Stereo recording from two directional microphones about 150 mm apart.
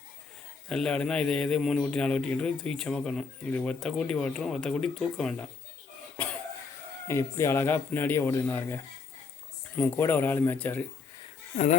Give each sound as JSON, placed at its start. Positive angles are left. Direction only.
{"t": 0.7, "sound": "a man's voice", "side_deg": 5}
{"t": 7.1, "sound": "speech", "side_deg": 20}
{"t": 11.5, "sound": "speech", "side_deg": 50}